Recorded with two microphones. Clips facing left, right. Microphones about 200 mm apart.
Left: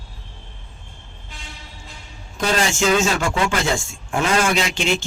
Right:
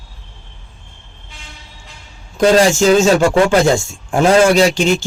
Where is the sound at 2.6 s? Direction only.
35° right (ahead or behind).